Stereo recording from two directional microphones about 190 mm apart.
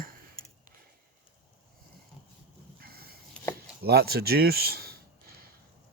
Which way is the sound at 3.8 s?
55° right (ahead or behind).